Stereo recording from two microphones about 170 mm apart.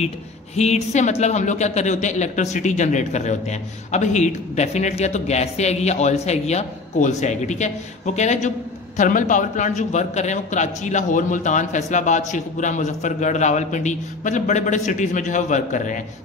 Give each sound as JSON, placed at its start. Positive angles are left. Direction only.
{"t": 0.6, "sound": "speech", "side_deg": 40}